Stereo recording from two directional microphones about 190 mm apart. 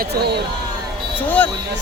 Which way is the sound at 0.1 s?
60° right (ahead or behind).